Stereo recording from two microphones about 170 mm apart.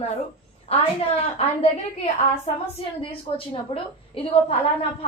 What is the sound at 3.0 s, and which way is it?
A woman's voice, 30° left (ahead or behind).